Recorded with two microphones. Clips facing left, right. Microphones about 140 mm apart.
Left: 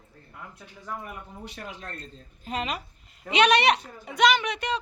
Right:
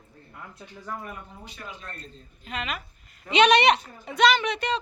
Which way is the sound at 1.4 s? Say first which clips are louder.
Left 2 dB; 70° left (ahead or behind).